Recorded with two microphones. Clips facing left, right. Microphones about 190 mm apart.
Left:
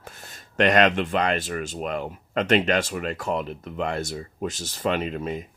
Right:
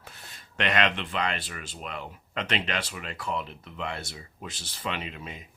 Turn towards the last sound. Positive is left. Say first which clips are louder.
# left 10 dB
turn(degrees=45)  # may be behind; listen again after turning